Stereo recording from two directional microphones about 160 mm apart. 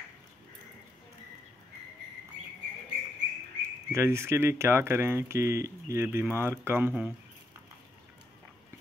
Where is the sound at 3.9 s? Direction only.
15° right (ahead or behind).